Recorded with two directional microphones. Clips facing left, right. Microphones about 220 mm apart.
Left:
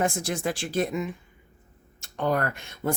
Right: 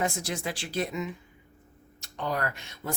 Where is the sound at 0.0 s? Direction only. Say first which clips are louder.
Left 4 dB; 50° left (ahead or behind).